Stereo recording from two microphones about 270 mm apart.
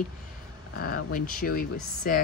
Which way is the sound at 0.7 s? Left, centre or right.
Left.